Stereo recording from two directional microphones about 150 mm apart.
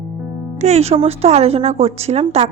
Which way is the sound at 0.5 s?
50° right (ahead or behind).